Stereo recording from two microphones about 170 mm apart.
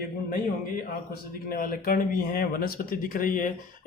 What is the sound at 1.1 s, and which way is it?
A man's voice, 60° left (ahead or behind).